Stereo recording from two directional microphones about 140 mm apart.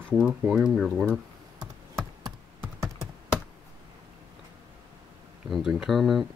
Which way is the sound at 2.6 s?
20° right (ahead or behind).